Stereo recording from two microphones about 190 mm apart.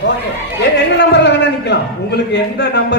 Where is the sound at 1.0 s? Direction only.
65° left (ahead or behind).